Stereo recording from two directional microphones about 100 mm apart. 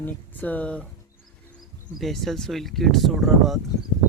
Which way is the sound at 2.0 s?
Centre (ahead or behind).